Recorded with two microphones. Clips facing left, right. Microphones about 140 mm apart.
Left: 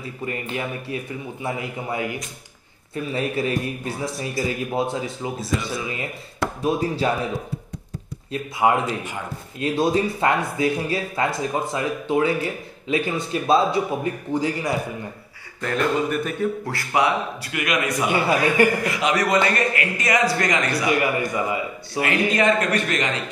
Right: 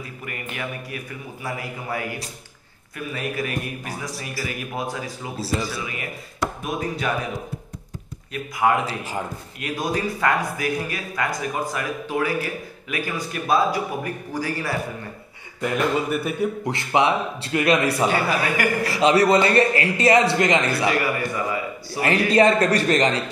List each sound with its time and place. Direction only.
0.0 s speech: 25° left (ahead or behind)
8.3 s speech: 25° left (ahead or behind)
15.6 s a man's voice: 10° right (ahead or behind); by 18.0 s 30° right (ahead or behind)
18.0 s speech: 20° left (ahead or behind)
18.9 s a man's voice: 30° right (ahead or behind)
20.9 s speech: 20° left (ahead or behind)
22.3 s a man's voice: 35° right (ahead or behind)